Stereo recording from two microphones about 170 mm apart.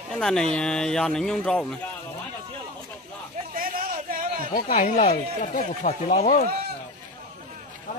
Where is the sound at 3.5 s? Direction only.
55° right (ahead or behind).